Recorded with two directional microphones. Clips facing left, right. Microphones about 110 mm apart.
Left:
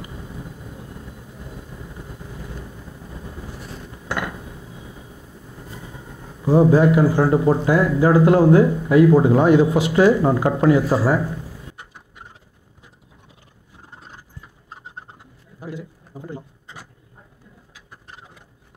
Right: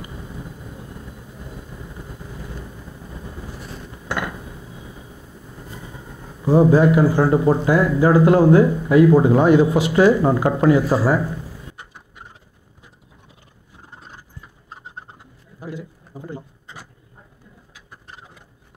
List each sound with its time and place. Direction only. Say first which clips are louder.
6.4 s speech: even; 25° right (ahead or behind)
13.9 s horse: right 1 dB; 20° right (ahead or behind)
15.6 s a sound: even; 20° right (ahead or behind)